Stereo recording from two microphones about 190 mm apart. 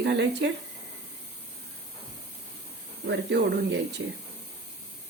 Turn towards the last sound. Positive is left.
turn(degrees=-65)  # may be behind; listen again after turning